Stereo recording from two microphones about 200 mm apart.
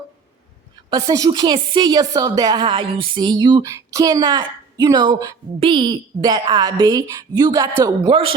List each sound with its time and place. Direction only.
0.9 s a woman's voice: 20° right (ahead or behind)